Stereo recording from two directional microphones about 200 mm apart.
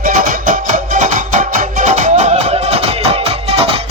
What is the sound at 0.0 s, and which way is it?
Music, 40° right (ahead or behind).